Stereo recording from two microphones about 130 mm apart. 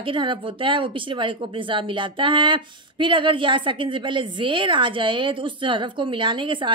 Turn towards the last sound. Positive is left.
turn(degrees=-40)  # may be behind; listen again after turning